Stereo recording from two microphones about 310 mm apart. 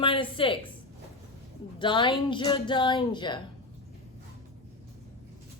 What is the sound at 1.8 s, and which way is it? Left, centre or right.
A woman's voice, centre.